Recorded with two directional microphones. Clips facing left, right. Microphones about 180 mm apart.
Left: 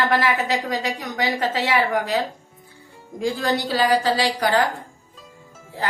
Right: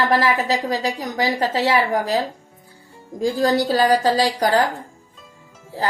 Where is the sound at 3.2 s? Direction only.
40° right (ahead or behind).